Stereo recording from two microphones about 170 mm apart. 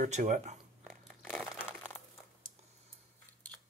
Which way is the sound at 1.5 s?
5° right (ahead or behind).